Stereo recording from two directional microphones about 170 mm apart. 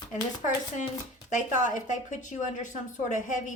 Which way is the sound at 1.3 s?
45° left (ahead or behind).